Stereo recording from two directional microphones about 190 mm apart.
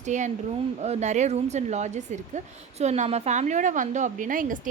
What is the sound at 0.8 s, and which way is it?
A woman's voice, 35° right (ahead or behind).